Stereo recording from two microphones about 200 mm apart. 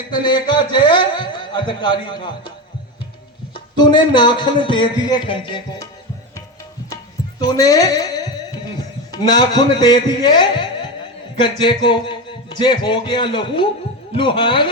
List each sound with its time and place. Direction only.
0.1 s speech: 20° left (ahead or behind)
3.5 s speech: 20° left (ahead or behind)
6.9 s speech: 20° left (ahead or behind)